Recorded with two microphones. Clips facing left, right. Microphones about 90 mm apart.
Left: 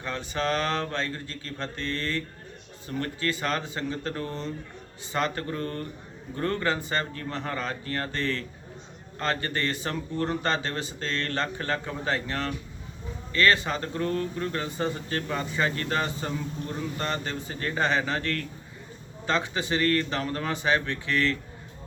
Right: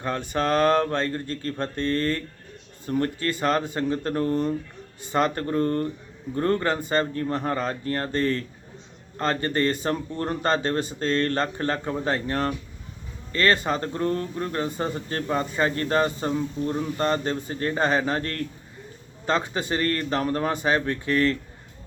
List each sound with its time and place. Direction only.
0.0 s speech: 45° right (ahead or behind)